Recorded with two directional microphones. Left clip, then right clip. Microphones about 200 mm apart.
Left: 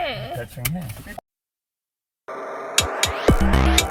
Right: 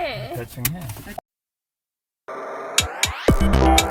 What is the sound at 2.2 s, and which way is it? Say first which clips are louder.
Music: even; centre (ahead or behind).